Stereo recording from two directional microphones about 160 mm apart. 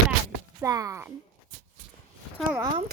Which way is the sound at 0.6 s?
20° right (ahead or behind).